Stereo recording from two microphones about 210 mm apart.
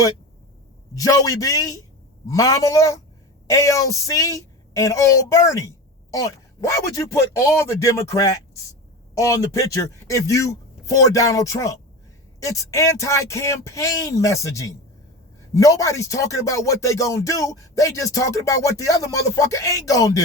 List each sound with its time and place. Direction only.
0.9 s a woman's voice: 15° left (ahead or behind)